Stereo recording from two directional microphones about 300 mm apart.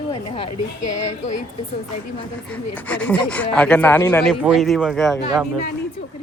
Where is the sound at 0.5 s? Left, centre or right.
Left.